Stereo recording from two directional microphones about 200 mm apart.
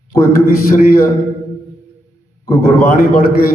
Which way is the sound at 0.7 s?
45° left (ahead or behind).